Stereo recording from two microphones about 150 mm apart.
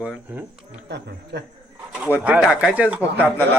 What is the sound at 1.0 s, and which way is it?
Speech, 90° right.